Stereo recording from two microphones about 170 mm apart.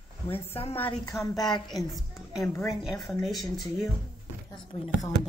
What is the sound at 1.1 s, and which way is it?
Speech, 20° left (ahead or behind).